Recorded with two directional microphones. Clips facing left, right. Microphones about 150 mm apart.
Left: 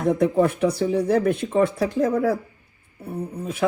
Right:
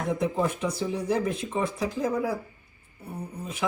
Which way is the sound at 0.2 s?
65° left (ahead or behind).